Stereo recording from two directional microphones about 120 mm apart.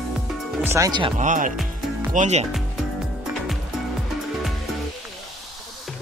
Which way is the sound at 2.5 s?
5° right (ahead or behind).